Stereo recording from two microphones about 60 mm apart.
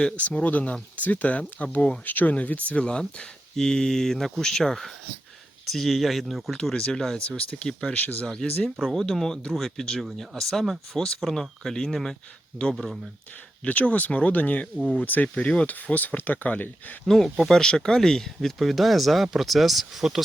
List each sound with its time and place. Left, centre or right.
0.2 s speech: left; by 6.6 s centre
6.6 s speech: centre
7.2 s speech: centre
7.9 s speech: left
8.3 s speech: centre
13.7 s speech: left
17.1 s speech: centre